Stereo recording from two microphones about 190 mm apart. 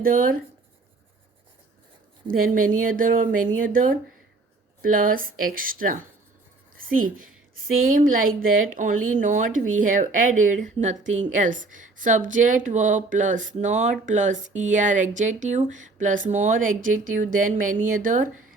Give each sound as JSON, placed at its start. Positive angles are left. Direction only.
{"t": 0.0, "sound": "speech", "side_deg": -50}
{"t": 2.2, "sound": "a woman's voice", "side_deg": -45}